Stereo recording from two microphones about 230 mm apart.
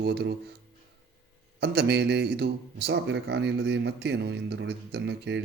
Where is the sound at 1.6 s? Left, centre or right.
Right.